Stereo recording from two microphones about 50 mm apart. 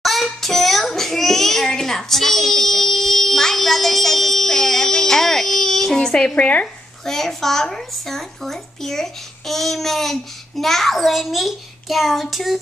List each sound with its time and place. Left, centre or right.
0.0 s child singing: centre
6.3 s speech: left
7.1 s speech: centre